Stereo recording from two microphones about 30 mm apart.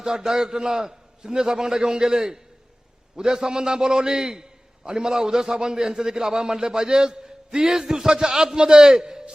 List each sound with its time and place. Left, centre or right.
0.0 s a man's voice: right